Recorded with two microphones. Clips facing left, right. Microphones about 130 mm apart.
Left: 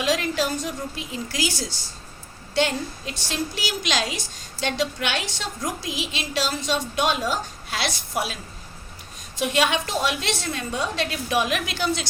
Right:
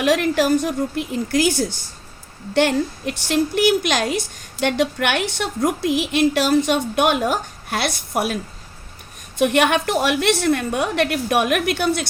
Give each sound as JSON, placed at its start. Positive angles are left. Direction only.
{"t": 0.0, "sound": "a woman's voice", "side_deg": -60}
{"t": 9.4, "sound": "a woman's voice", "side_deg": -60}